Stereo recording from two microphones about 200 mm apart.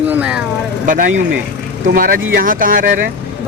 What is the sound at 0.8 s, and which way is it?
Speech, 40° right (ahead or behind).